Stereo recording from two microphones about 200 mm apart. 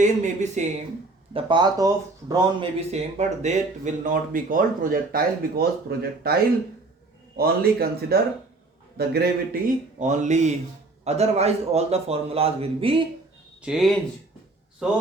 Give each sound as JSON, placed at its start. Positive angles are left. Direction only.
{"t": 0.0, "sound": "speech", "side_deg": -35}
{"t": 1.3, "sound": "speech", "side_deg": -25}
{"t": 13.6, "sound": "speech", "side_deg": 0}